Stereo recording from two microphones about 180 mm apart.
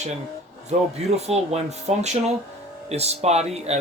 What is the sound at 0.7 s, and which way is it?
Speech, 35° right (ahead or behind).